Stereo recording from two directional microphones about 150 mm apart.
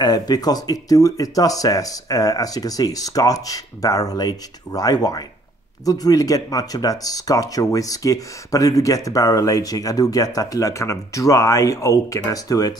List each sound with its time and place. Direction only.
0.0 s speech: 25° left (ahead or behind)